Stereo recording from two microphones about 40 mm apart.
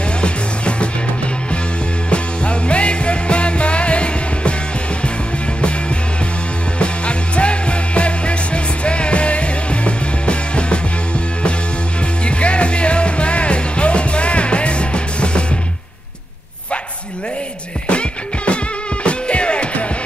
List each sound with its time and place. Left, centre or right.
0.2 s music: left
2.0 s music: left
6.8 s music: left
12.3 s music: left
17.8 s music: left